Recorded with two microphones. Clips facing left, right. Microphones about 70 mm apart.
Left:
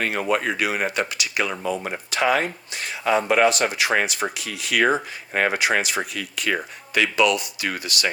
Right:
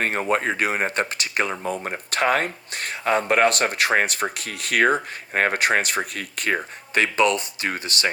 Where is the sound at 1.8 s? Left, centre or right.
Right.